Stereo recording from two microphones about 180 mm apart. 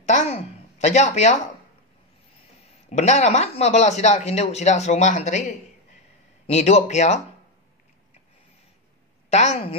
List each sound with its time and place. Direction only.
0.0 s a sound: 40° left (ahead or behind)
2.9 s speech: 40° left (ahead or behind)
6.4 s speech: 35° left (ahead or behind)
9.3 s speech: 40° left (ahead or behind)